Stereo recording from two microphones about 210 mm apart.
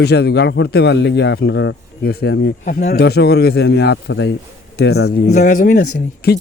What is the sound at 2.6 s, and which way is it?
Speech, 35° left (ahead or behind).